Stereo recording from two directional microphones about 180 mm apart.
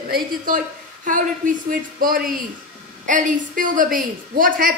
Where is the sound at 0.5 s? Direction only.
50° right (ahead or behind).